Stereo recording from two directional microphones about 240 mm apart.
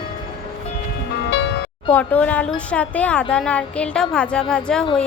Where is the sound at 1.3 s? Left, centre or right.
Left.